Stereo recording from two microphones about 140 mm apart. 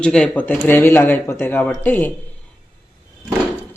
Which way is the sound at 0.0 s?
5° left (ahead or behind).